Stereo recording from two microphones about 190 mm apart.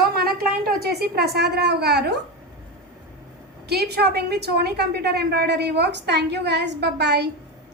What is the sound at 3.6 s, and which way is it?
A woman's voice, 60° right (ahead or behind).